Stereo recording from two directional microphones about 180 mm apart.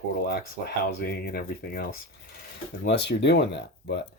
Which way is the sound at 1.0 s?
60° left (ahead or behind).